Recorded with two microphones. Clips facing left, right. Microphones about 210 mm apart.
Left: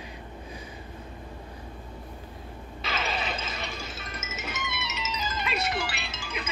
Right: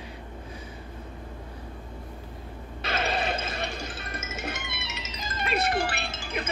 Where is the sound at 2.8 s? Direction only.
55° right (ahead or behind).